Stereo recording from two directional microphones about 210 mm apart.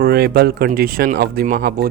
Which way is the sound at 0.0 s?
45° right (ahead or behind).